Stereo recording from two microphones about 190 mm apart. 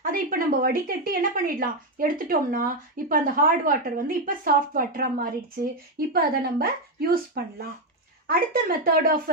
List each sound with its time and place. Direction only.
0.0 s speech: 50° right (ahead or behind)